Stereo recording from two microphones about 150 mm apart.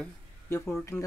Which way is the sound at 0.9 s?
15° left (ahead or behind).